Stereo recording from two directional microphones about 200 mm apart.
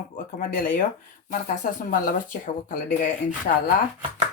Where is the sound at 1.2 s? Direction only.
40° left (ahead or behind).